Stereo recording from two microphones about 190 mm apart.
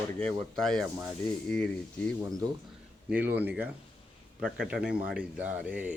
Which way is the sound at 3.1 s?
10° right (ahead or behind).